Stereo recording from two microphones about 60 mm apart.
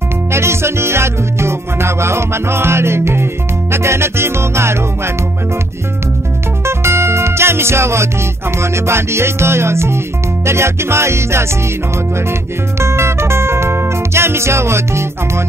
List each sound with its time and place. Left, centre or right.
0.3 s music: right
6.6 s music: right